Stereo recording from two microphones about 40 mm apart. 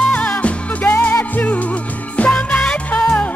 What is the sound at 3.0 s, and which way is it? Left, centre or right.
Music, left.